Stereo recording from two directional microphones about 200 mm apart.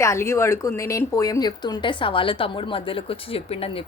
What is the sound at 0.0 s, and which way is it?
Speech, 15° left (ahead or behind).